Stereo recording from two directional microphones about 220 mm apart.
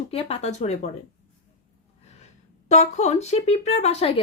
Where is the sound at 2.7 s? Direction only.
30° left (ahead or behind).